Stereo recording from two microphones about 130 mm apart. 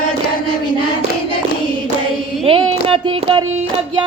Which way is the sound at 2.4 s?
45° right (ahead or behind).